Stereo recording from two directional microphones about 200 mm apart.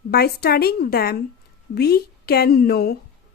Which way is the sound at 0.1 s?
50° left (ahead or behind).